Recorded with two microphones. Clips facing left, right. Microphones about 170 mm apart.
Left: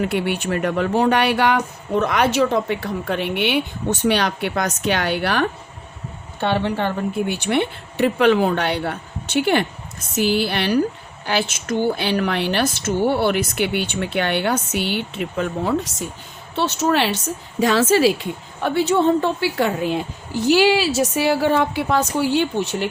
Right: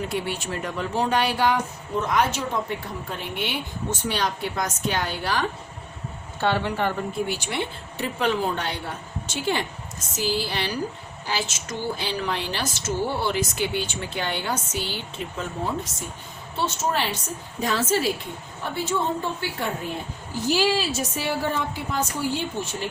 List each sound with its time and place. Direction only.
0.0 s speech: 65° left (ahead or behind)
6.4 s speech: 25° left (ahead or behind)
7.3 s a woman's voice: 60° left (ahead or behind); by 22.9 s 75° left (ahead or behind)